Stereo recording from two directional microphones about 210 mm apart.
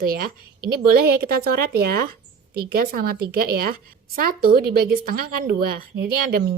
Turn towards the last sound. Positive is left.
turn(degrees=-50)  # may be behind; listen again after turning